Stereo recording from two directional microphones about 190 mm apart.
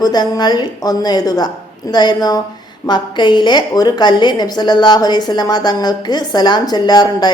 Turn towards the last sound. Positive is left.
turn(degrees=20)  # may be behind; listen again after turning